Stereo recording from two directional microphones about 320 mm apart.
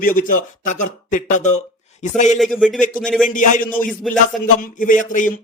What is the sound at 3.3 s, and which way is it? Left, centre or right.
A man's voice, left.